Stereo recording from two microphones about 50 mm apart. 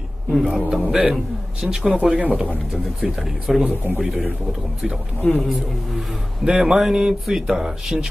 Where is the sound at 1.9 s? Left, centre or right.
Right.